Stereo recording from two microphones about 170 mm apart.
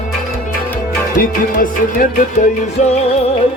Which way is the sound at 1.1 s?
55° left (ahead or behind).